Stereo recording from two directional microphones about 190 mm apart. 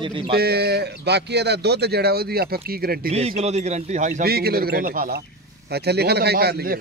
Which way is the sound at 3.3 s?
35° right (ahead or behind).